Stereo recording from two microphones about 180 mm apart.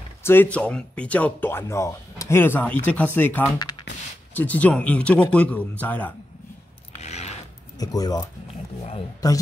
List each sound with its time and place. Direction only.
0.2 s speech: 10° left (ahead or behind)
7.0 s a sound: 35° left (ahead or behind)
7.8 s speech: 20° left (ahead or behind)